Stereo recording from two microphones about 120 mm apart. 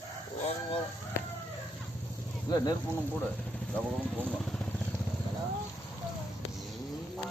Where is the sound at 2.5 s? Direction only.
35° left (ahead or behind).